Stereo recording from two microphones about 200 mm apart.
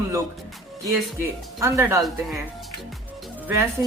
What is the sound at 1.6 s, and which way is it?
Speech, 15° right (ahead or behind).